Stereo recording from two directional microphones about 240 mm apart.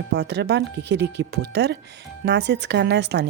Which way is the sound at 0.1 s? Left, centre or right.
Right.